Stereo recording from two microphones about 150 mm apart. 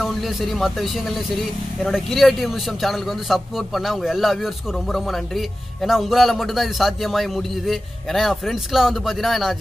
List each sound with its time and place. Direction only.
0.0 s a man's voice: centre (ahead or behind)
1.9 s a man's voice: centre (ahead or behind)